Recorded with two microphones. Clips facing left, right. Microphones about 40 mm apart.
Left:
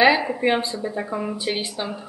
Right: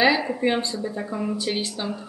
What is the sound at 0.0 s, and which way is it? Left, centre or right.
Speech, centre.